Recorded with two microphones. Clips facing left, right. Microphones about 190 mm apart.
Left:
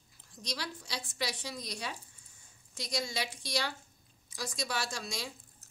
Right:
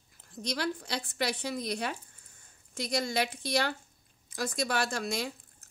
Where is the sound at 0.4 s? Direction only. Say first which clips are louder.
Right 8 dB; 55° right (ahead or behind).